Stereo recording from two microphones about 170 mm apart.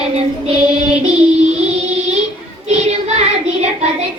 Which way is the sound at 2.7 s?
40° right (ahead or behind).